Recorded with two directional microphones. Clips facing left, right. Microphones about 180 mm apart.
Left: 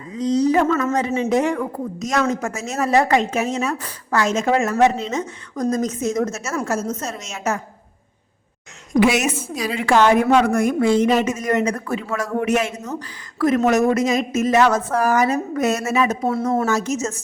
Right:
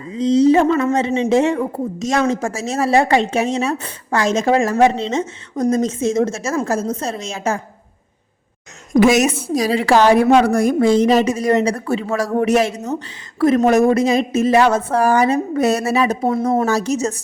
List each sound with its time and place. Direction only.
0.1 s a woman's voice: 25° right (ahead or behind)
8.9 s a woman's voice: 45° right (ahead or behind)